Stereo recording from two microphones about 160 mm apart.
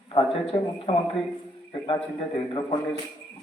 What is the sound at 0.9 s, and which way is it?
A man's voice, 40° left (ahead or behind).